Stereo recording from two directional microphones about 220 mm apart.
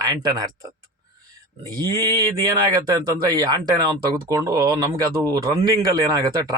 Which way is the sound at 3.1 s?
15° right (ahead or behind).